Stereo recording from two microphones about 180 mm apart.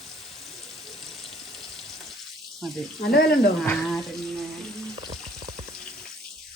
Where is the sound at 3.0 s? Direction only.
60° left (ahead or behind).